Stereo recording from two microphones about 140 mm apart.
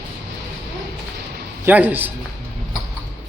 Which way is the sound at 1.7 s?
10° right (ahead or behind).